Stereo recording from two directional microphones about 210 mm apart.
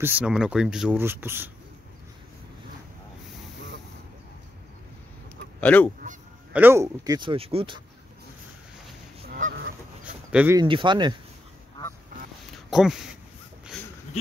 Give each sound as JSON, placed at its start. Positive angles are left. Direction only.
{"t": 0.0, "sound": "speech", "side_deg": -5}
{"t": 5.6, "sound": "goose", "side_deg": 5}
{"t": 6.5, "sound": "speech", "side_deg": -10}
{"t": 9.2, "sound": "goose", "side_deg": -45}
{"t": 10.3, "sound": "speech", "side_deg": -10}
{"t": 10.6, "sound": "speech", "side_deg": -20}
{"t": 12.4, "sound": "a sound", "side_deg": 0}